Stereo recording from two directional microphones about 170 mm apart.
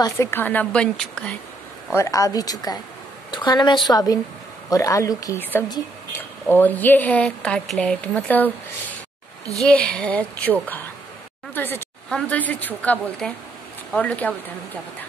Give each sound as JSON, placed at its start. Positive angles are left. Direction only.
{"t": 0.0, "sound": "speech", "side_deg": 15}
{"t": 2.0, "sound": "a woman's voice", "side_deg": 20}
{"t": 9.6, "sound": "speech", "side_deg": 5}